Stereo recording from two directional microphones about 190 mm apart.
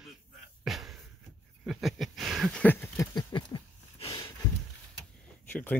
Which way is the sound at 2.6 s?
10° left (ahead or behind).